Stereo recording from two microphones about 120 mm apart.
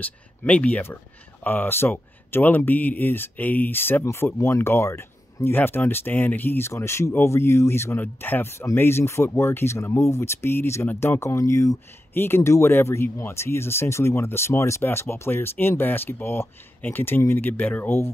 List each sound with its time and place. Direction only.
0.0 s speech: 15° left (ahead or behind)